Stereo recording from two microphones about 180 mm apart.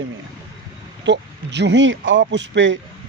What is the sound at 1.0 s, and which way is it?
Speech, 75° right (ahead or behind).